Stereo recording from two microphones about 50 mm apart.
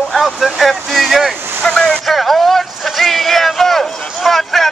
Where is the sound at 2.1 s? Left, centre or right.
Centre.